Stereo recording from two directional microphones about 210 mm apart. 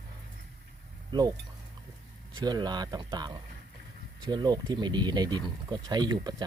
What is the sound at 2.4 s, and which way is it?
Speech, 20° right (ahead or behind).